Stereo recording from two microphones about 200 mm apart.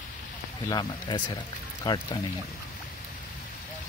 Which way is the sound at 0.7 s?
20° left (ahead or behind).